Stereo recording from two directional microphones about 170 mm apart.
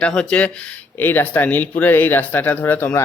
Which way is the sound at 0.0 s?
5° left (ahead or behind).